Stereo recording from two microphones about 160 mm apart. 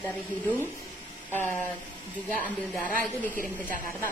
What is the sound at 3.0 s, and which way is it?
Speech, 10° left (ahead or behind).